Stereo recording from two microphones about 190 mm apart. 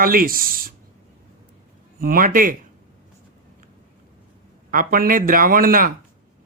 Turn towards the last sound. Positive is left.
turn(degrees=-50)  # may be behind; listen again after turning